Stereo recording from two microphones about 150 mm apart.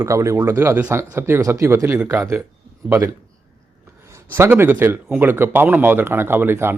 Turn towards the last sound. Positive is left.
turn(degrees=-15)  # may be behind; listen again after turning